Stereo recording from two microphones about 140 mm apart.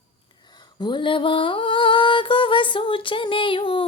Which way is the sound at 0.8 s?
35° left (ahead or behind).